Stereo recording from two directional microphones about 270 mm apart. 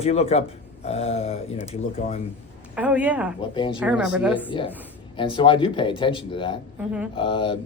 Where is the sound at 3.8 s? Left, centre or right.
Centre.